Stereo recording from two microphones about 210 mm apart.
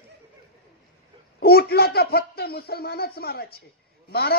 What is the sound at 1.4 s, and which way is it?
A woman's voice, 50° left (ahead or behind).